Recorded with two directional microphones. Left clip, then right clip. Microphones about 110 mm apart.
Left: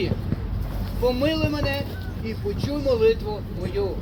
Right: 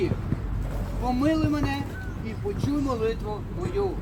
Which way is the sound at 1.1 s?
20° right (ahead or behind).